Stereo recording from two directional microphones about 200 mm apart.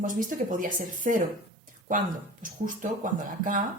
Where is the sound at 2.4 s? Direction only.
40° right (ahead or behind).